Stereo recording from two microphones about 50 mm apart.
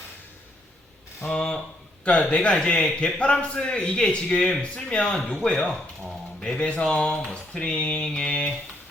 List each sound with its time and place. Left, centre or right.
1.2 s a man's voice: centre
8.0 s speech: centre
8.3 s a man's voice: left